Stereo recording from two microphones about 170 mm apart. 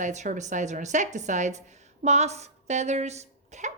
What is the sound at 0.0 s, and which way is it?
A woman's voice, 45° right (ahead or behind).